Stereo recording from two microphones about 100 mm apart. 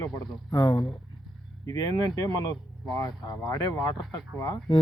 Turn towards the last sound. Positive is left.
turn(degrees=45)  # may be behind; listen again after turning